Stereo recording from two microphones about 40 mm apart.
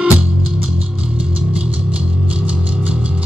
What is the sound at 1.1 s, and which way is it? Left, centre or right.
Music, right.